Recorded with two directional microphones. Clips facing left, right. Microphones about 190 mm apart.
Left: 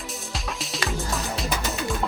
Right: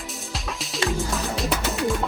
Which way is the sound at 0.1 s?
Centre (ahead or behind).